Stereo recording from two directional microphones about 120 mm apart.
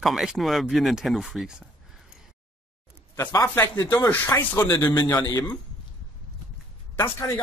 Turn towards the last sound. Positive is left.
turn(degrees=20)  # may be behind; listen again after turning